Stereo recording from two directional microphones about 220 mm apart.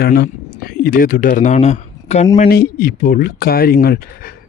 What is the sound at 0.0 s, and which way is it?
Speech, 45° left (ahead or behind).